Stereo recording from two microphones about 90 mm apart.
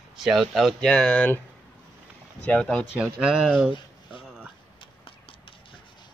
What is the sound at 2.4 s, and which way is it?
Speech, 15° left (ahead or behind).